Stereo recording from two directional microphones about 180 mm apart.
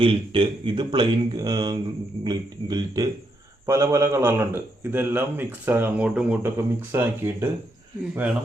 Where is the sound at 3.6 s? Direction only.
15° right (ahead or behind).